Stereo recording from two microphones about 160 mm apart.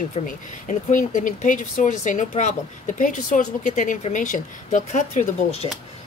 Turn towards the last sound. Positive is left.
turn(degrees=45)  # may be behind; listen again after turning